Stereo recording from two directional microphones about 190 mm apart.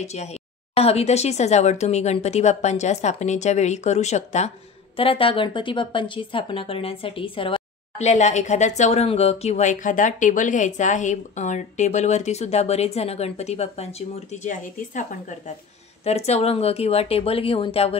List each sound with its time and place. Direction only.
0.0 s speech: 35° left (ahead or behind)